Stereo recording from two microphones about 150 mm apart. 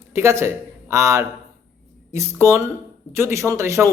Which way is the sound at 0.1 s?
15° right (ahead or behind).